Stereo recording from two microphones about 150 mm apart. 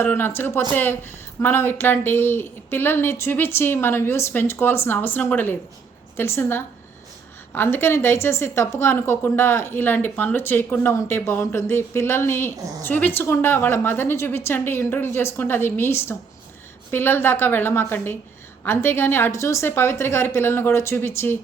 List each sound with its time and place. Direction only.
0.0 s a woman's voice: 15° left (ahead or behind)